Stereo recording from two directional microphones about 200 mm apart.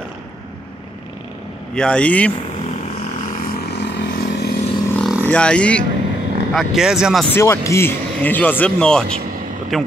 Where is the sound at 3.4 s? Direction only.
50° left (ahead or behind).